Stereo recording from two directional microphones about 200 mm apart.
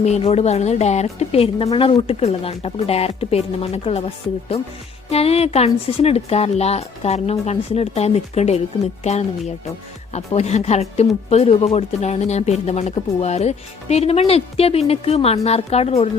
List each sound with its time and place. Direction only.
0.0 s a woman's voice: 35° left (ahead or behind)